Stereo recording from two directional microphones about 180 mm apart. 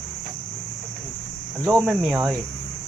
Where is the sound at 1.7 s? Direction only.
5° right (ahead or behind).